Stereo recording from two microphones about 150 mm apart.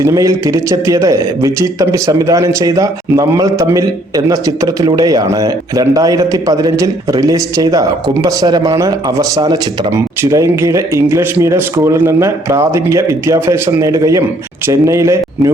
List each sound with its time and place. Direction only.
0.0 s a man's voice: 20° right (ahead or behind)